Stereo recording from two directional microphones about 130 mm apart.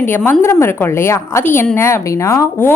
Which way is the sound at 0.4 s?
20° left (ahead or behind).